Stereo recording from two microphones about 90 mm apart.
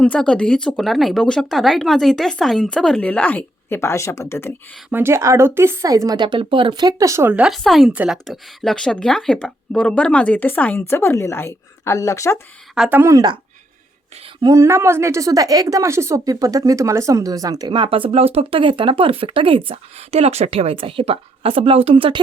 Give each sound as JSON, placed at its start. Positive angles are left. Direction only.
{"t": 0.0, "sound": "speech", "side_deg": 10}
{"t": 4.9, "sound": "a woman's voice", "side_deg": -25}
{"t": 6.1, "sound": "speech", "side_deg": -60}
{"t": 7.4, "sound": "speech", "side_deg": 0}
{"t": 7.9, "sound": "speech", "side_deg": -10}
{"t": 8.7, "sound": "speech", "side_deg": 5}
{"t": 12.8, "sound": "speech", "side_deg": 0}
{"t": 14.4, "sound": "a woman's voice", "side_deg": -35}
{"t": 17.7, "sound": "speech", "side_deg": -80}